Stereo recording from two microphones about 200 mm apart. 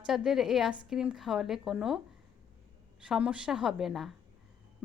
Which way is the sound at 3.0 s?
5° right (ahead or behind).